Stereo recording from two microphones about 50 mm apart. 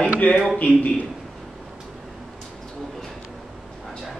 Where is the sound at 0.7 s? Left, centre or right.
Left.